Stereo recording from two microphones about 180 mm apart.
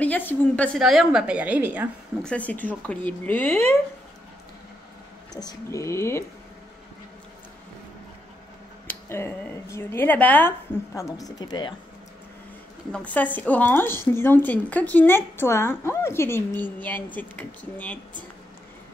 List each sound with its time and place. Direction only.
0.0 s speech: 10° left (ahead or behind)
0.7 s a woman's voice: centre (ahead or behind)
2.2 s speech: 10° left (ahead or behind)
5.3 s speech: 20° left (ahead or behind)
8.8 s speech: 10° left (ahead or behind)
12.9 s speech: 10° left (ahead or behind)